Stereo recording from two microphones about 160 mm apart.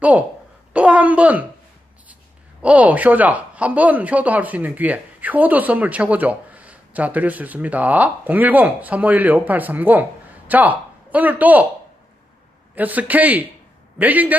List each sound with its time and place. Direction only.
0.0 s speech: 10° right (ahead or behind)
2.6 s speech: 10° right (ahead or behind)
12.7 s speech: 10° right (ahead or behind)